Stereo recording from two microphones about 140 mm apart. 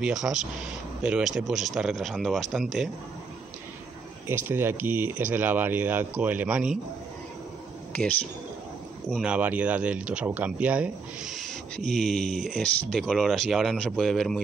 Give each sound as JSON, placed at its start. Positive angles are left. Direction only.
{"t": 0.0, "sound": "speech", "side_deg": -5}
{"t": 4.5, "sound": "speech", "side_deg": -15}
{"t": 9.1, "sound": "speech", "side_deg": -5}